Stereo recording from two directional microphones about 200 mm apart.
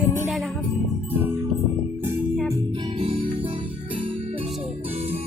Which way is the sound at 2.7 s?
25° right (ahead or behind).